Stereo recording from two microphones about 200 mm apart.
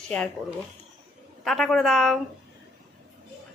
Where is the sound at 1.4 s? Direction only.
Centre (ahead or behind).